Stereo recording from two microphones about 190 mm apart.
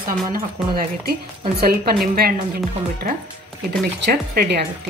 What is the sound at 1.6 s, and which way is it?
Dishes, 55° right (ahead or behind).